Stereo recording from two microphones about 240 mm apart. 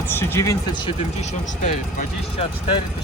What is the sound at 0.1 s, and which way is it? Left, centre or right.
Speech, centre.